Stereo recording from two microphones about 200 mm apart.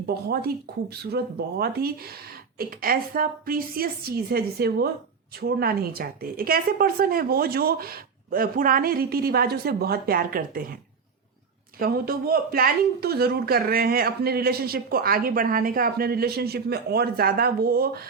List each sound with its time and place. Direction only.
0.1 s speech: 50° right (ahead or behind)
11.8 s speech: 50° right (ahead or behind)